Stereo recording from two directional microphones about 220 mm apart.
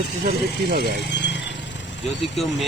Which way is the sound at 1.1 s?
55° left (ahead or behind).